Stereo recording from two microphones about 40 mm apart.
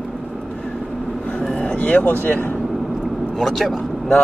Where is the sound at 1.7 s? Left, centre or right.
Left.